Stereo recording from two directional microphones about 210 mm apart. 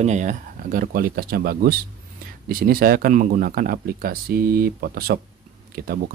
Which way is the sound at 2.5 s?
45° right (ahead or behind).